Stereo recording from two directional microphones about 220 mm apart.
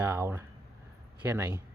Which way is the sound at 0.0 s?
10° right (ahead or behind).